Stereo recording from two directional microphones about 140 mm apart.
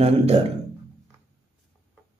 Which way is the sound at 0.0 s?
50° right (ahead or behind).